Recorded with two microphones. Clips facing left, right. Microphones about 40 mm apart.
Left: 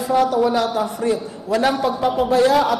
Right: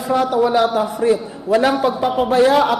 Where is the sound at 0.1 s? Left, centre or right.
Right; by 2.0 s centre.